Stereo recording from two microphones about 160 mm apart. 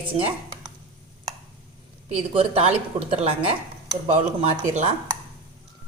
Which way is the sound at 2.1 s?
40° right (ahead or behind).